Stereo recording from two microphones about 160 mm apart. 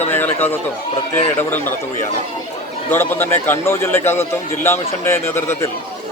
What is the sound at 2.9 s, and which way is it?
Speech, 15° left (ahead or behind).